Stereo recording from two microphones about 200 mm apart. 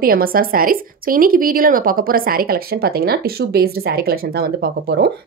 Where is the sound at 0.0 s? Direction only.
45° right (ahead or behind).